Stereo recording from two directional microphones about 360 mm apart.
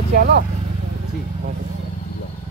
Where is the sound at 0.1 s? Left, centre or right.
Right.